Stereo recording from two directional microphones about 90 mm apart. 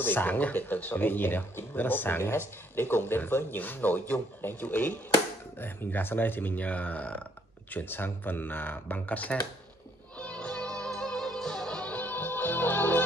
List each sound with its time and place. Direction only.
0.0 s speech: 20° left (ahead or behind)
10.1 s music: 15° left (ahead or behind)